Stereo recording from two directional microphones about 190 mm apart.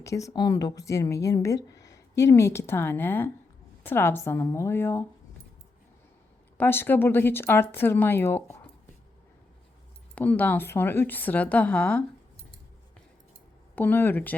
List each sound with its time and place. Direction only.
0.0 s speech: 15° left (ahead or behind)
6.6 s speech: 10° left (ahead or behind)
10.2 s speech: 10° left (ahead or behind)
13.7 s speech: 10° left (ahead or behind)